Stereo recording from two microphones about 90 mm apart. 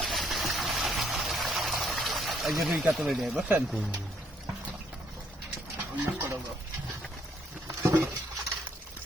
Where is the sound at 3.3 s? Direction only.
15° right (ahead or behind).